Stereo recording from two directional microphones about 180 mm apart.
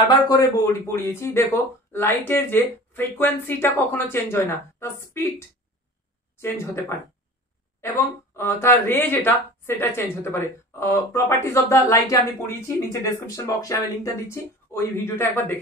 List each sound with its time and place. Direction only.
0.1 s speech: 20° left (ahead or behind)